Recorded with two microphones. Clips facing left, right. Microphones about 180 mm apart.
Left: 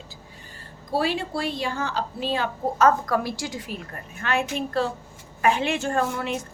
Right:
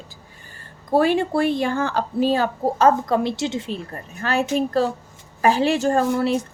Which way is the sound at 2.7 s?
25° right (ahead or behind).